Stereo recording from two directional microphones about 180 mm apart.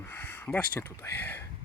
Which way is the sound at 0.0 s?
10° left (ahead or behind).